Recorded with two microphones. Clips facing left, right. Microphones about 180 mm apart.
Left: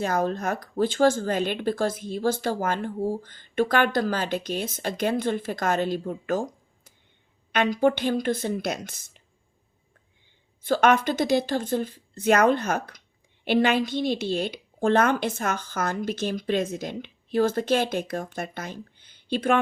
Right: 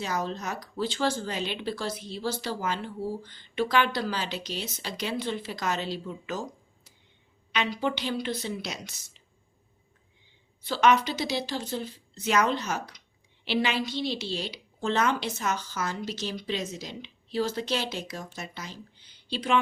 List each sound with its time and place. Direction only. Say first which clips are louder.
0.0 s speech: left 6 dB; 50° left (ahead or behind)
10.6 s speech: left 3 dB; 50° left (ahead or behind)